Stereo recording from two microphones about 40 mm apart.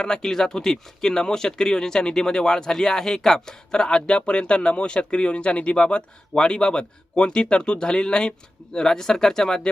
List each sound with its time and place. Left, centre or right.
0.0 s speech: centre